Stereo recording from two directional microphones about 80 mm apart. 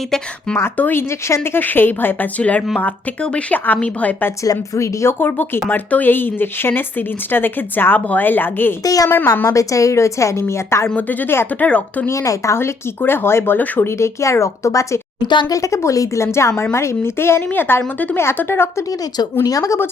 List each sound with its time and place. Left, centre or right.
0.5 s speech: left
4.4 s speech: left
5.6 s speech: left
8.8 s speech: left
10.9 s speech: left
12.0 s speech: left
14.0 s speech: left
19.1 s speech: left